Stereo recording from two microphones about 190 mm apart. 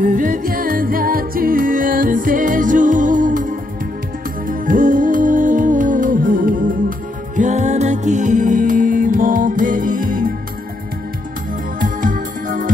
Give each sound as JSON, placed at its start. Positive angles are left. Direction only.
{"t": 0.0, "sound": "music", "side_deg": -45}
{"t": 11.8, "sound": "music", "side_deg": -45}